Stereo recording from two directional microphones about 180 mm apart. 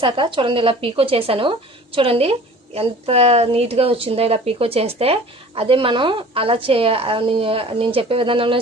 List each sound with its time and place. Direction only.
0.0 s a woman's voice: 25° right (ahead or behind)